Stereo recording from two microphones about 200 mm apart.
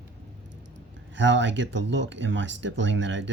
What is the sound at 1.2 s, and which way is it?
Speech, 65° right (ahead or behind).